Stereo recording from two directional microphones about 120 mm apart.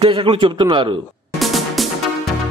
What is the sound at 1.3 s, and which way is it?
Music, centre (ahead or behind).